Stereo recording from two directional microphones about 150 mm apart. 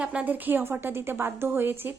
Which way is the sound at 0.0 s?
10° right (ahead or behind).